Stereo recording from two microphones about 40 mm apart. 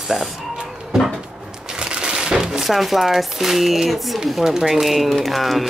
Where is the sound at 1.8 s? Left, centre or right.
Centre.